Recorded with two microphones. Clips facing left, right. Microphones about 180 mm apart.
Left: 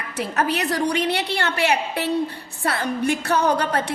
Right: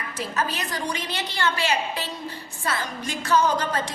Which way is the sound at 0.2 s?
65° left (ahead or behind).